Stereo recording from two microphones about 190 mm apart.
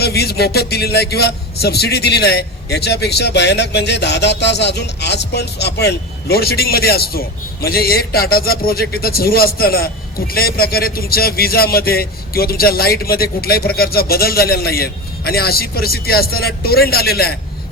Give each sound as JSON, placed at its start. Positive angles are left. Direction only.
{"t": 0.0, "sound": "a man's voice", "side_deg": 55}